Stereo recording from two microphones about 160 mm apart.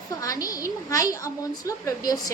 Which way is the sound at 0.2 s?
20° left (ahead or behind).